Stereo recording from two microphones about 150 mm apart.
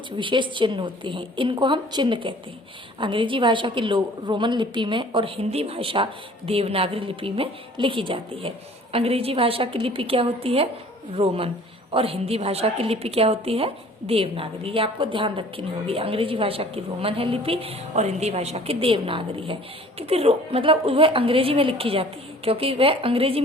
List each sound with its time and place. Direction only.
0.2 s a woman's voice: 35° right (ahead or behind)